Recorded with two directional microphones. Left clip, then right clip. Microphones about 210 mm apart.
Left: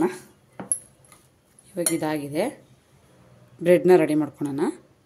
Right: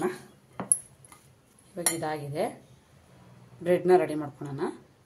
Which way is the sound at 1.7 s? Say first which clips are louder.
Left 6 dB; 40° left (ahead or behind).